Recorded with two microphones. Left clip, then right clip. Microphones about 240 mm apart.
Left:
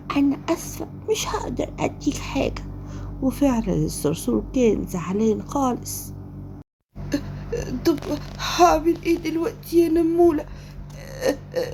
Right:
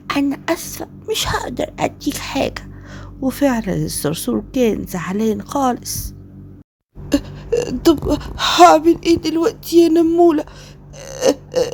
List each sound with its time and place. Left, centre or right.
0.1 s a woman's voice: right
7.1 s a woman's voice: right
11.0 s a sound: right